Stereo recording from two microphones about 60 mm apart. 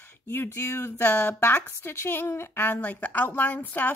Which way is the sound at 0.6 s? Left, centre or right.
Left.